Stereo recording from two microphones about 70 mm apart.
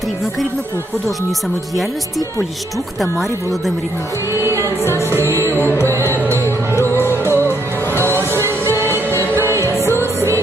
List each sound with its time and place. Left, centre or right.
1.7 s speech: centre
4.3 s music: right
4.8 s music: left
5.3 s music: right
5.5 s music: left
8.4 s music: right
9.8 s music: left